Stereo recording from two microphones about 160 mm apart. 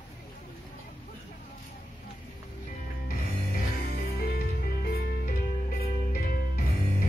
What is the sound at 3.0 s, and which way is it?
Music, 70° left (ahead or behind).